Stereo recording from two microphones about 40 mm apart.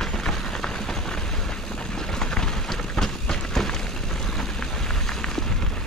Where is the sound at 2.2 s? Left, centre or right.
Centre.